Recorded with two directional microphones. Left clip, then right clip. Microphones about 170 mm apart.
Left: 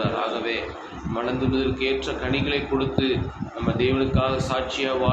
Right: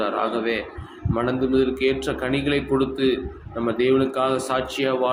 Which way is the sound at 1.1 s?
55° right (ahead or behind).